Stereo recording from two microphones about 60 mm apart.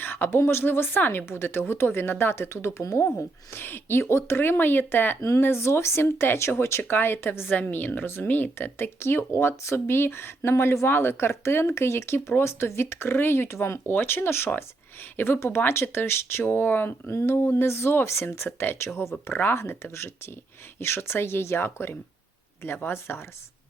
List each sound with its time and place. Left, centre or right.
0.0 s speech: left
5.4 s speech: left
7.5 s speech: left
19.3 s speech: left
19.5 s speech: left